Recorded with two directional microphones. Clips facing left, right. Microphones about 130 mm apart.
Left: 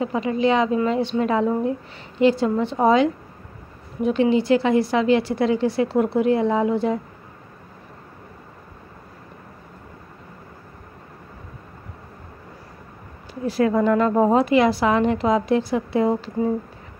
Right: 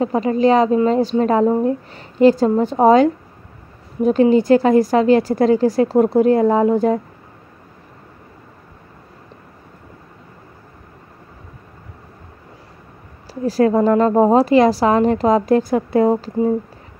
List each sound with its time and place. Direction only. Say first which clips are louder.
0.0 s speech: right 5 dB; 40° right (ahead or behind)
13.3 s speech: right 5 dB; 35° right (ahead or behind)